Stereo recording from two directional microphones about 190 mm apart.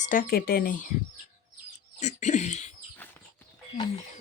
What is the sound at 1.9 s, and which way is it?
Speech, 35° left (ahead or behind).